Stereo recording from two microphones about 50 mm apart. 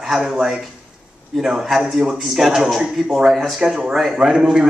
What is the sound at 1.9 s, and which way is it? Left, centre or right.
A man's voice, centre.